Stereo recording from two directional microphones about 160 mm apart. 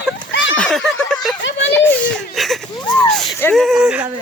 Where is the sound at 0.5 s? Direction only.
5° left (ahead or behind).